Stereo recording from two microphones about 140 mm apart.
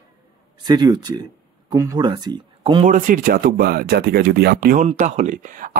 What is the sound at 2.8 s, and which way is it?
Speech, 70° right (ahead or behind).